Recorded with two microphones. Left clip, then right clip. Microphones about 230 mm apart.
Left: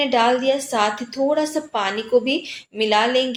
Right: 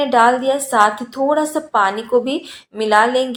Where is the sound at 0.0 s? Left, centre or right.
Right.